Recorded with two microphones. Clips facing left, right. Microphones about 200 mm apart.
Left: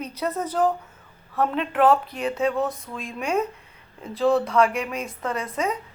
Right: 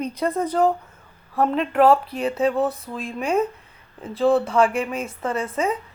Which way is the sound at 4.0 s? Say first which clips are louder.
Right 2 dB; centre (ahead or behind).